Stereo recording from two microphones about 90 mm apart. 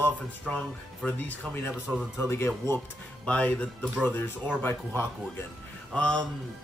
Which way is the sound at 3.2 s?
15° left (ahead or behind).